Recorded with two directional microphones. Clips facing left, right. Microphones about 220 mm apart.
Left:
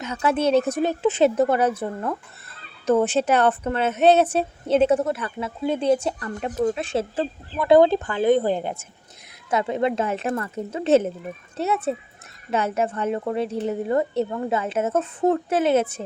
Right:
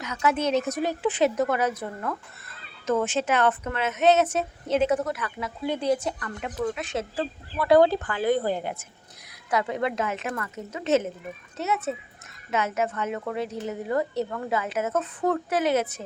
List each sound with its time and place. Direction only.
0.0 s a woman's voice: 30° left (ahead or behind)